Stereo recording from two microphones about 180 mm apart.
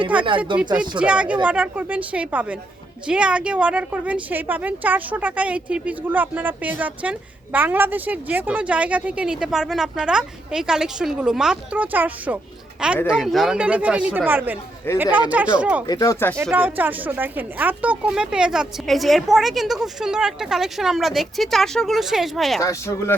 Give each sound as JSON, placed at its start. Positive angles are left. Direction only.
{"t": 0.2, "sound": "speech", "side_deg": -25}
{"t": 0.8, "sound": "a woman's voice", "side_deg": -5}
{"t": 15.9, "sound": "speech", "side_deg": 20}
{"t": 16.4, "sound": "speech", "side_deg": -10}
{"t": 22.6, "sound": "speech", "side_deg": 15}